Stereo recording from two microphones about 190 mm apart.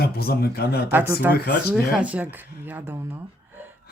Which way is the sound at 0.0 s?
55° left (ahead or behind).